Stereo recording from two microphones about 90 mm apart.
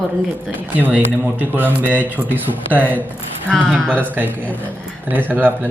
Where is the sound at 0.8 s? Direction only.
20° right (ahead or behind).